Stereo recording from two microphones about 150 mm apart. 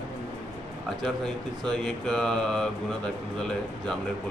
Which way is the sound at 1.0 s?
5° left (ahead or behind).